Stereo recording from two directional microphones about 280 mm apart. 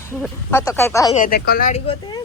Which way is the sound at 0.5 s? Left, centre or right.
Centre.